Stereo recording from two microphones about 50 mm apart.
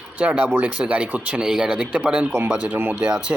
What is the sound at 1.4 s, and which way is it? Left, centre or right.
Speech, centre.